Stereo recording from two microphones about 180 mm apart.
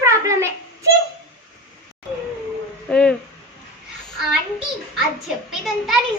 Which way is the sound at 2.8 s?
5° left (ahead or behind).